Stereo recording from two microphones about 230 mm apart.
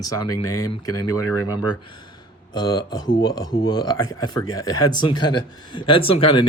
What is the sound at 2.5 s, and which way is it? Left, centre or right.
Speech, centre.